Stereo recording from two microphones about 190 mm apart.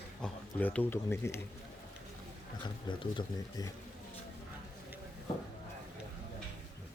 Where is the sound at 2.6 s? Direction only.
25° left (ahead or behind).